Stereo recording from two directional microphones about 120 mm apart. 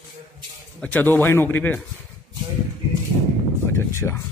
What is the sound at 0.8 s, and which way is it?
A man's voice, 15° left (ahead or behind).